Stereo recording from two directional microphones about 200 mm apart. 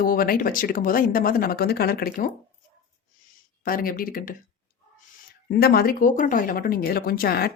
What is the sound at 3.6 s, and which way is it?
Speech, 45° left (ahead or behind).